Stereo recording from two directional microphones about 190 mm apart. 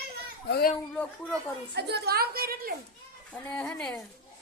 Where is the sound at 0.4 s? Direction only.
55° left (ahead or behind).